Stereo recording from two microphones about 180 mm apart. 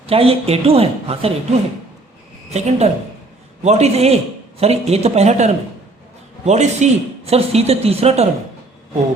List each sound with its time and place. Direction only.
0.0 s speech: 30° right (ahead or behind)
2.5 s speech: 40° right (ahead or behind)